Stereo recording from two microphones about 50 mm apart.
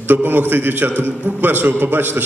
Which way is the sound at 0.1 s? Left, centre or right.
Right.